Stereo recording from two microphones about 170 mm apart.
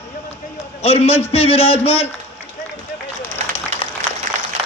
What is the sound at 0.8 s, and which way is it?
A man's voice, 40° left (ahead or behind).